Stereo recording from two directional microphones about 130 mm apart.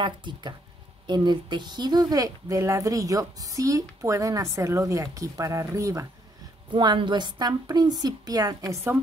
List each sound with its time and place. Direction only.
0.0 s a woman's voice: 35° right (ahead or behind)
6.7 s a woman's voice: 35° right (ahead or behind)